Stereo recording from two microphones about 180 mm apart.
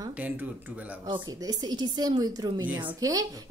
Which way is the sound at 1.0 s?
25° right (ahead or behind).